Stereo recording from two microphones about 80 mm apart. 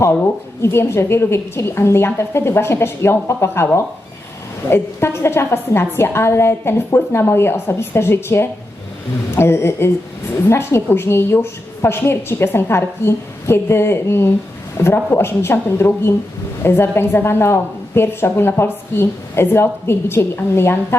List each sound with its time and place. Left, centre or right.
0.6 s a woman's voice: left